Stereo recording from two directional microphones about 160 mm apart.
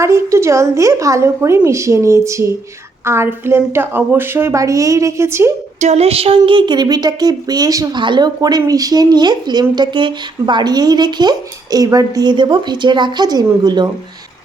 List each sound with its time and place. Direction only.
0.0 s a woman's voice: 15° right (ahead or behind)
5.8 s a woman's voice: 40° right (ahead or behind); by 13.9 s 25° right (ahead or behind)